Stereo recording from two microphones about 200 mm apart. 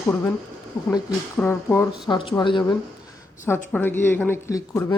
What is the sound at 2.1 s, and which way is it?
Mantra, 25° left (ahead or behind).